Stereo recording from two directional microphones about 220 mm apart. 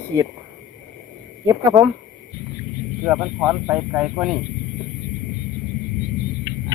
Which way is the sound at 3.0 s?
5° right (ahead or behind).